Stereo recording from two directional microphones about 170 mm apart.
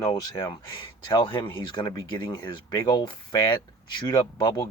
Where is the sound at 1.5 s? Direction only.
25° left (ahead or behind).